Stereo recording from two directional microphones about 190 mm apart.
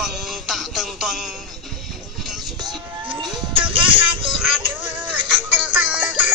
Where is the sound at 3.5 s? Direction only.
25° right (ahead or behind).